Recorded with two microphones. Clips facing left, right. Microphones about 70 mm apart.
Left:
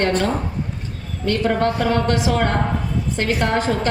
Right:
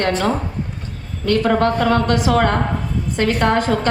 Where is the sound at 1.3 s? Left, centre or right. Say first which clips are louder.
Right 3 dB; right.